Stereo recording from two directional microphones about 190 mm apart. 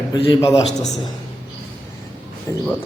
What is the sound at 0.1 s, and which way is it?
Speech, 20° left (ahead or behind).